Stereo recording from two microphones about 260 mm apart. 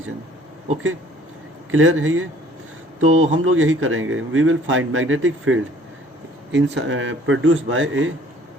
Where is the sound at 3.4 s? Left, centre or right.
Right.